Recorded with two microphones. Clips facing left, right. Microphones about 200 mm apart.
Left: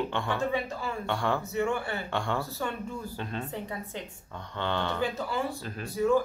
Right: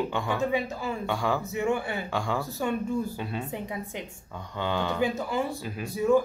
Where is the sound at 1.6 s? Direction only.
15° right (ahead or behind).